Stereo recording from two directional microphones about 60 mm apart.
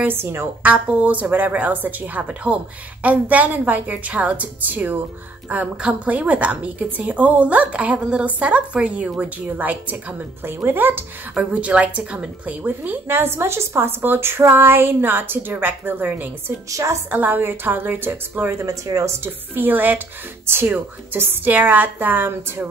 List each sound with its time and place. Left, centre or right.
0.0 s a woman's voice: right
0.6 s a woman's voice: right
10.4 s a woman's voice: right
11.3 s a woman's voice: centre
12.6 s a woman's voice: right
16.7 s a woman's voice: right
17.1 s a woman's voice: right
18.7 s speech: right
19.2 s a woman's voice: right
20.4 s a woman's voice: right